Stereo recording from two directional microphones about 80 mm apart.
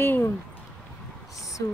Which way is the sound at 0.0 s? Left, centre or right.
Left.